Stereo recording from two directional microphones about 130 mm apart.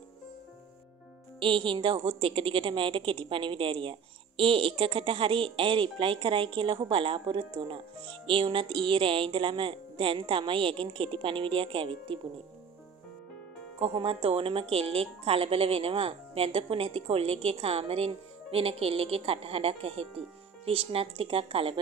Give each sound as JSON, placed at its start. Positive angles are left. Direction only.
{"t": 1.4, "sound": "a woman's voice", "side_deg": -40}
{"t": 13.7, "sound": "speech", "side_deg": -45}